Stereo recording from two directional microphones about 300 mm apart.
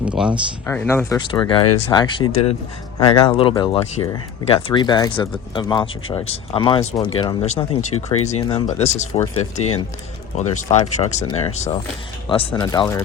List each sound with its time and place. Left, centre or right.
0.0 s speech: centre
0.6 s speech: centre